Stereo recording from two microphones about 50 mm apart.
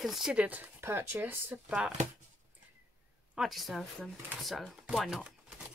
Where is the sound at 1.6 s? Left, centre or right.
Centre.